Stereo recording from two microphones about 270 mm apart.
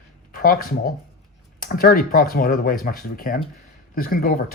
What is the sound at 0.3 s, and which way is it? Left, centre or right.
Speech, left.